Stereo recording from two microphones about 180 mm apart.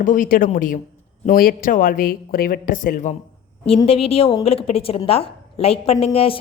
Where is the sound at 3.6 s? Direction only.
30° left (ahead or behind).